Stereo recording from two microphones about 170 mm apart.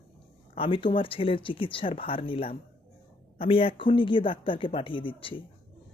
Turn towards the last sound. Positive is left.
turn(degrees=30)  # may be behind; listen again after turning